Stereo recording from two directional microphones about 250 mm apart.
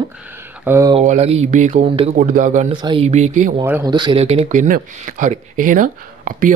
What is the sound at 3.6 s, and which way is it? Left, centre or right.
Speech, centre.